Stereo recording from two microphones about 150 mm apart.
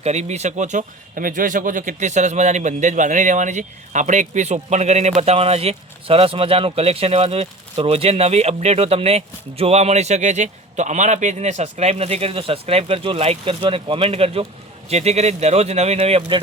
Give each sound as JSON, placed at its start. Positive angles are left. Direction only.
{"t": 0.0, "sound": "speech", "side_deg": -45}